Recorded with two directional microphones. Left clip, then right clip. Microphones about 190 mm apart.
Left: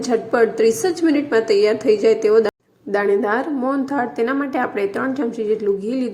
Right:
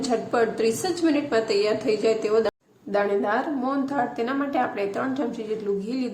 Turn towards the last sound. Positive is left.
turn(degrees=25)  # may be behind; listen again after turning